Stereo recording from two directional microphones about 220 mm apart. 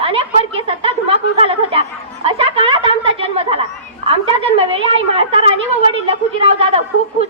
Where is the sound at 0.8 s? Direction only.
25° right (ahead or behind).